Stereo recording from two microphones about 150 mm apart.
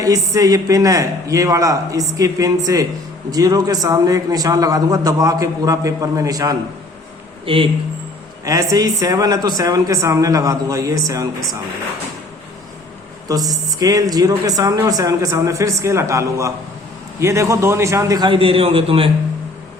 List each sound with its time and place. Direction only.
0.0 s a man's voice: 20° right (ahead or behind)
7.4 s speech: 35° right (ahead or behind)
8.4 s a man's voice: 25° right (ahead or behind)
13.2 s a man's voice: 25° right (ahead or behind)